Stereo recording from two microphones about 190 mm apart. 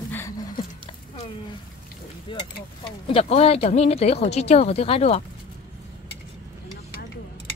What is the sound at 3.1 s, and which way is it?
Speech, 30° left (ahead or behind).